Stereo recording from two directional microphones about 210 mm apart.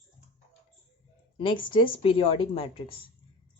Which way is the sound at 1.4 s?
25° left (ahead or behind).